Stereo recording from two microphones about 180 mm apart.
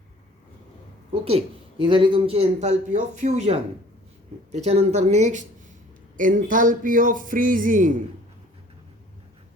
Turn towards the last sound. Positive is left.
turn(degrees=-45)  # may be behind; listen again after turning